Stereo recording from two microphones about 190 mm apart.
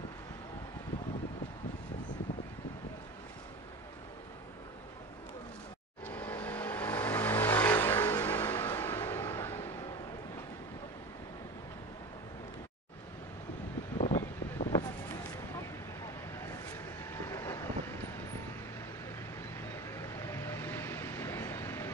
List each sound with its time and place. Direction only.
6.0 s vehicle: 10° left (ahead or behind)
13.9 s a sound: 30° left (ahead or behind)
16.3 s vehicle: 15° left (ahead or behind)
19.5 s vehicle: 15° left (ahead or behind)